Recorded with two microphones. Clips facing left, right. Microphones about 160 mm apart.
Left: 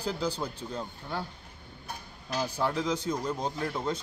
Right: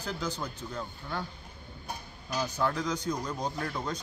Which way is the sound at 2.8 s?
25° left (ahead or behind).